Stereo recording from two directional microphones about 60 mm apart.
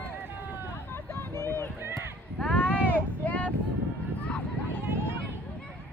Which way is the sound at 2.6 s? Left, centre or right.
Left.